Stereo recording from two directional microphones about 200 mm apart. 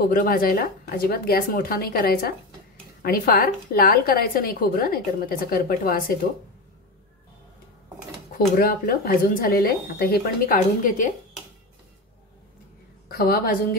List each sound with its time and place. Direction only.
0.0 s a woman's voice: 45° left (ahead or behind)
8.5 s a woman's voice: 45° left (ahead or behind)
13.1 s a woman's voice: 50° left (ahead or behind)